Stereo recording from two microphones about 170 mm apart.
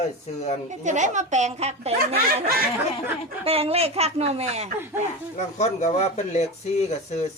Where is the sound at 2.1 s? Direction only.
65° right (ahead or behind).